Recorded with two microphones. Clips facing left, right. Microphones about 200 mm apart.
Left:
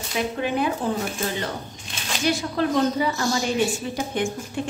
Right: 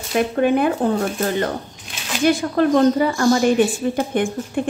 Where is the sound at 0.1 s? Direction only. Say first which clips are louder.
Right 8 dB; 55° right (ahead or behind).